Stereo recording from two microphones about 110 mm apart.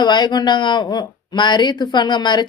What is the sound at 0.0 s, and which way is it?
Speech, 40° left (ahead or behind).